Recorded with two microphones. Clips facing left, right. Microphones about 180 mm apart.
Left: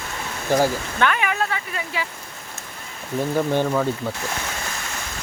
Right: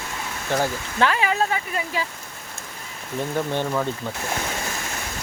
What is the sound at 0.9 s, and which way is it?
Speech, 30° right (ahead or behind).